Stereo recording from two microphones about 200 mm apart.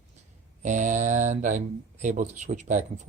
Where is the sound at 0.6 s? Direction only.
40° right (ahead or behind).